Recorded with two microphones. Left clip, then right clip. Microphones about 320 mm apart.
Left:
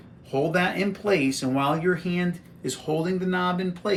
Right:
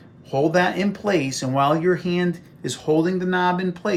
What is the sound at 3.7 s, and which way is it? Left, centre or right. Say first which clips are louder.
Speech: right 2 dB; centre.